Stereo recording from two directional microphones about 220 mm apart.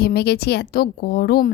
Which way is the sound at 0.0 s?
45° left (ahead or behind).